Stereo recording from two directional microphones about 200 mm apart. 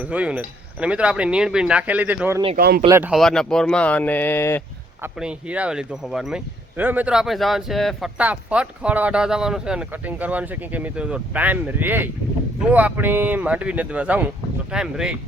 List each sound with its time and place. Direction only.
0.0 s speech: 5° right (ahead or behind)
2.6 s speech: 50° right (ahead or behind)
2.8 s speech: 15° right (ahead or behind)
3.1 s speech: centre (ahead or behind)
5.2 s speech: 5° right (ahead or behind)